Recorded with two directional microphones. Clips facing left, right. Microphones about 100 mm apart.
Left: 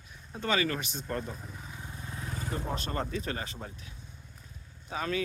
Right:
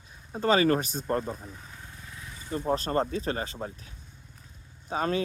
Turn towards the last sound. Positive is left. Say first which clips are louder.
# right 5 dB
turn(degrees=-35)  # may be behind; listen again after turning